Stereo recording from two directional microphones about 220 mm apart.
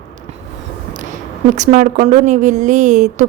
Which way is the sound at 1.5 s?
35° right (ahead or behind).